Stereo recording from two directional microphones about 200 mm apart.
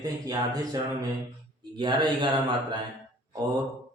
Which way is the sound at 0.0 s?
20° right (ahead or behind).